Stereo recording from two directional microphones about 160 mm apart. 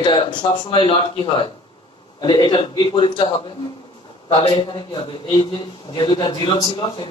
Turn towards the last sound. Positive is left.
turn(degrees=30)  # may be behind; listen again after turning